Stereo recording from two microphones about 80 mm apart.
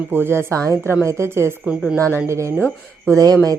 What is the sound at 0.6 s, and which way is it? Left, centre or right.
Speech, right.